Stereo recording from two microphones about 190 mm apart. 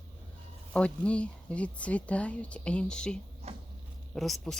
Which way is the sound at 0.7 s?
5° left (ahead or behind).